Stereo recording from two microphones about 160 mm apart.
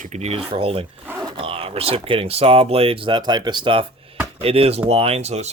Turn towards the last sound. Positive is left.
turn(degrees=-45)  # may be behind; listen again after turning